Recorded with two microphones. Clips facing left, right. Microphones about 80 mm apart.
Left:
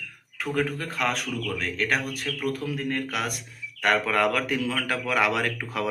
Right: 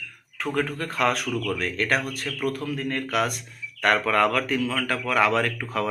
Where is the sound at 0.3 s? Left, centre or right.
Centre.